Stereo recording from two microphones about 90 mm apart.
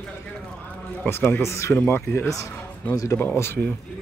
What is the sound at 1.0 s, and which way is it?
Speech, 25° left (ahead or behind).